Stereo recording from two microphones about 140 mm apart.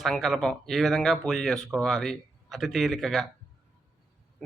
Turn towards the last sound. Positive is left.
turn(degrees=0)  # may be behind; listen again after turning